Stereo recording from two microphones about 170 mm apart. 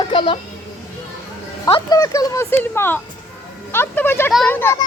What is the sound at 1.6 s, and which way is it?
A woman's voice, 25° left (ahead or behind).